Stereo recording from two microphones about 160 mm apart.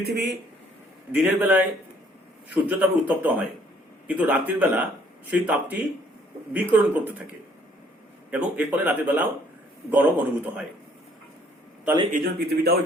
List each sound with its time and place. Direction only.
0.0 s speech: 85° right
1.1 s speech: 5° right (ahead or behind)
12.1 s speech: 80° right